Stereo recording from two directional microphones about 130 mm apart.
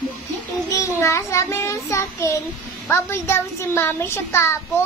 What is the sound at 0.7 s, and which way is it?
Child singing, 20° left (ahead or behind).